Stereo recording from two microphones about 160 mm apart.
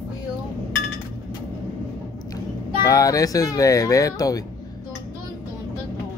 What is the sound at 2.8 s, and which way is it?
Speech, 20° left (ahead or behind).